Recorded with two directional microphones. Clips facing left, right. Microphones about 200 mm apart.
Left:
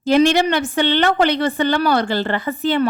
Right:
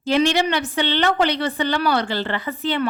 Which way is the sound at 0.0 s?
45° left (ahead or behind).